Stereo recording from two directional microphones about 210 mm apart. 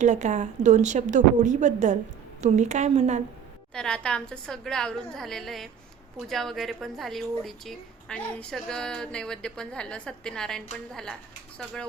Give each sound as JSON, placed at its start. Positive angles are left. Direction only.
{"t": 0.0, "sound": "a woman's voice", "side_deg": -35}
{"t": 3.8, "sound": "a woman's voice", "side_deg": 5}